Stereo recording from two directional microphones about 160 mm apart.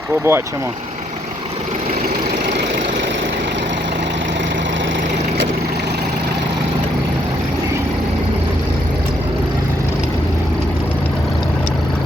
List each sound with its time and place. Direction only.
0.3 s speech: 15° right (ahead or behind)